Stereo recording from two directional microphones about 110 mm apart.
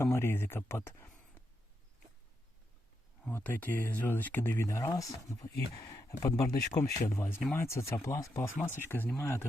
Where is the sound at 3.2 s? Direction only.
15° left (ahead or behind).